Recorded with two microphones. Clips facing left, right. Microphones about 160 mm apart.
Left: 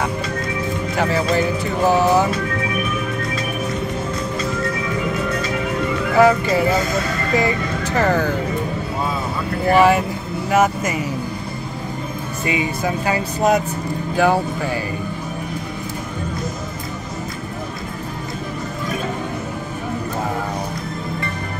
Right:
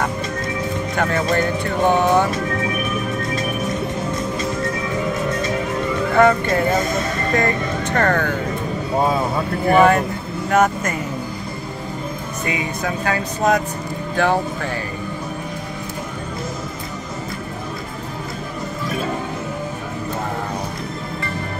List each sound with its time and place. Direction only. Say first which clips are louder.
0.9 s speech: left 1 dB; 5° left (ahead or behind)
6.1 s speech: left 1 dB; 5° left (ahead or behind)
6.9 s speech: even; 25° right (ahead or behind)
7.3 s speech: left 1 dB; 5° left (ahead or behind)
9.7 s speech: even; 5° left (ahead or behind)
12.4 s speech: left 3 dB; 10° left (ahead or behind)